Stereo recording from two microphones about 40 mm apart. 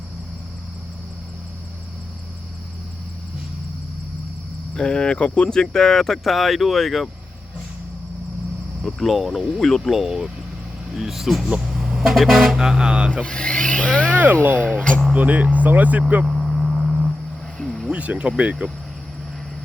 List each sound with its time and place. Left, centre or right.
4.7 s speech: centre
5.2 s speech: left; by 7.1 s centre
8.8 s speech: centre
10.0 s speech: centre
11.7 s vehicle: centre
12.1 s speech: centre; by 13.1 s right
13.2 s speech: left
15.1 s speech: right
16.2 s vehicle: centre
17.6 s a sound: centre
17.9 s speech: right